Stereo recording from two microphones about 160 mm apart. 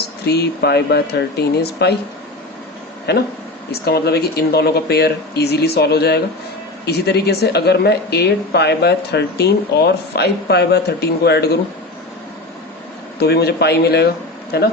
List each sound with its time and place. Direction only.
0.3 s speech: 90° left
3.1 s speech: 90° left
13.1 s speech: 90° left